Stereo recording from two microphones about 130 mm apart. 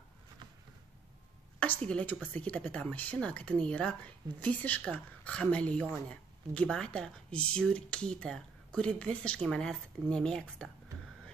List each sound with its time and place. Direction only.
1.9 s speech: 10° left (ahead or behind)